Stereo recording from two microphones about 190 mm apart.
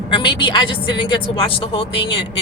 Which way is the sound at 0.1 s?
25° left (ahead or behind).